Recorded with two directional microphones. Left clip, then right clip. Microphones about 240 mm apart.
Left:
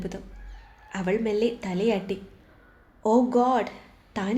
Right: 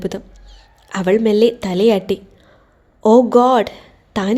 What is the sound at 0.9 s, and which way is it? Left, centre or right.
A woman's voice, right.